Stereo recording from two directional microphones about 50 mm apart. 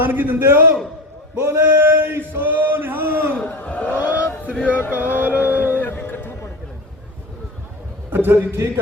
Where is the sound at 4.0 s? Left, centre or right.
Right.